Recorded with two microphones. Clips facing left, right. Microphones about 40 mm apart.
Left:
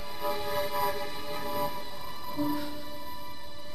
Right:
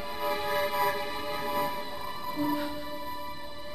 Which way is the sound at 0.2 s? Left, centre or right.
Centre.